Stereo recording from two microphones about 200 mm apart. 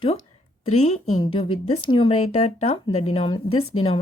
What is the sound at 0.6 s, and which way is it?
A woman's voice, 30° left (ahead or behind).